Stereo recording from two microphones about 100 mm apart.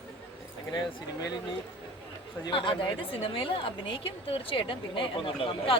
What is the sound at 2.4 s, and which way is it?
A woman's voice, 55° left (ahead or behind).